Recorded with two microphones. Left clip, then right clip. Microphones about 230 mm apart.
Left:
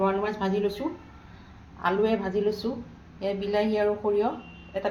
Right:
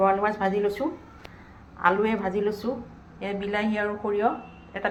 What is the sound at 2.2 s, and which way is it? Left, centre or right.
Speech, centre.